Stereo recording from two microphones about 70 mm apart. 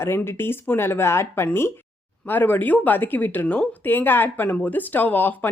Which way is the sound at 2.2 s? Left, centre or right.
Left.